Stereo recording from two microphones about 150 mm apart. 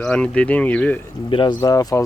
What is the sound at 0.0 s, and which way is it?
Speech, 5° left (ahead or behind).